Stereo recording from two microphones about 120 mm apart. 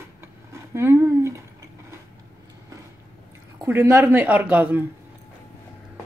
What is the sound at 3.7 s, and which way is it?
A man's voice, 20° right (ahead or behind).